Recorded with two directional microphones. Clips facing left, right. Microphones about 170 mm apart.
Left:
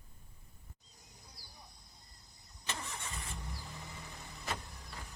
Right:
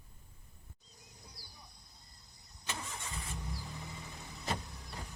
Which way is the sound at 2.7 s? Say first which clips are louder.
Even; 15° right (ahead or behind).